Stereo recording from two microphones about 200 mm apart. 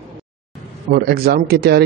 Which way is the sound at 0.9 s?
50° right (ahead or behind).